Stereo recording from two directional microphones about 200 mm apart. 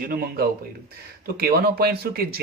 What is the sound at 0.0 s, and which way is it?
Speech, 45° right (ahead or behind).